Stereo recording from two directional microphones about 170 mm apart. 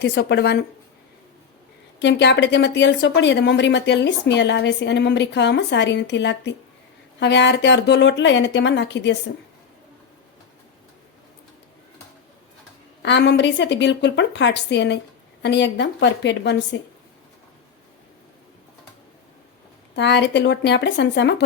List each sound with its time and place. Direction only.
0.0 s speech: 85° left
2.0 s speech: 90° left
13.0 s speech: 90° left
20.0 s speech: 90° left